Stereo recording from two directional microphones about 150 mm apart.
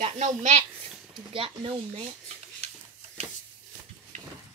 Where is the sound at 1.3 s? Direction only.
35° right (ahead or behind).